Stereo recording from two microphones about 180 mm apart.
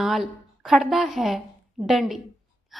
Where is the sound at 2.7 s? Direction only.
Centre (ahead or behind).